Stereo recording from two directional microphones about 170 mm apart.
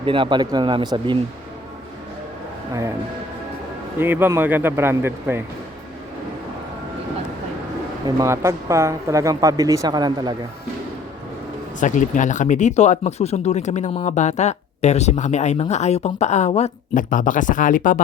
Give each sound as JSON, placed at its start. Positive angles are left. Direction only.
{"t": 0.0, "sound": "speech", "side_deg": -30}
{"t": 4.0, "sound": "speech", "side_deg": -10}
{"t": 8.0, "sound": "speech", "side_deg": -15}
{"t": 11.8, "sound": "speech", "side_deg": 50}